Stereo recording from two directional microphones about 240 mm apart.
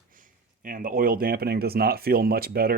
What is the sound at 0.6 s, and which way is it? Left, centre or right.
Speech, right.